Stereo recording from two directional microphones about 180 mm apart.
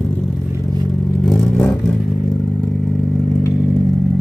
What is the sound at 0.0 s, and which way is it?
Vehicle, 5° left (ahead or behind).